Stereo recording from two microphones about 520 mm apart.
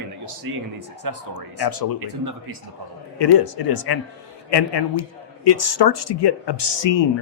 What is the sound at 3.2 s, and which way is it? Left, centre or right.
A man's voice, left.